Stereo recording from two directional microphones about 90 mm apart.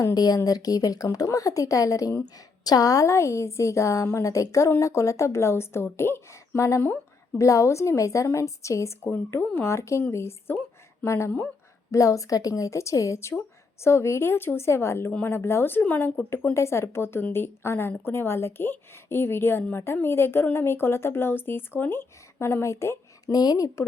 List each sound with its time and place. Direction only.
0.0 s a woman's voice: 45° left (ahead or behind)
23.3 s a woman's voice: 45° left (ahead or behind)